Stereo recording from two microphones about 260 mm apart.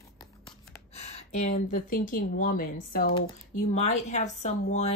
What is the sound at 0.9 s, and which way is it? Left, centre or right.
Speech, left.